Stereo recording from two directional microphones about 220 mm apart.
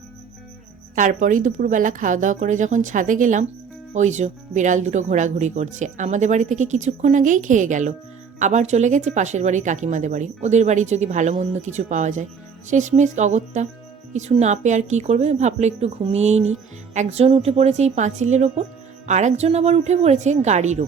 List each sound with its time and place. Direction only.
0.9 s speech: 35° right (ahead or behind)